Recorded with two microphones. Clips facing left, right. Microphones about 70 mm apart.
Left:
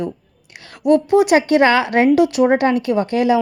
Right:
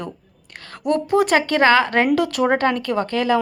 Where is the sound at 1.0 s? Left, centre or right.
Right.